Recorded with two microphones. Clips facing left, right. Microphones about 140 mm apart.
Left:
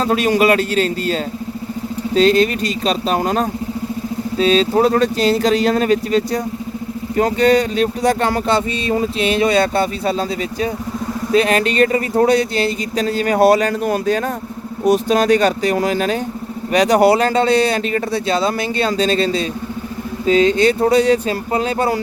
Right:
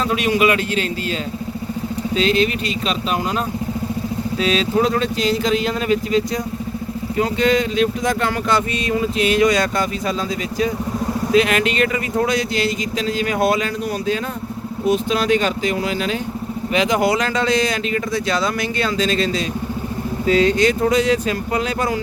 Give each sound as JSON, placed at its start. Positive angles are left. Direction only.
{"t": 0.0, "sound": "speech", "side_deg": 40}
{"t": 4.4, "sound": "speech", "side_deg": 35}